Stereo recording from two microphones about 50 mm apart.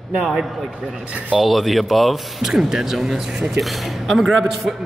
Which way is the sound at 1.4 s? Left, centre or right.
Centre.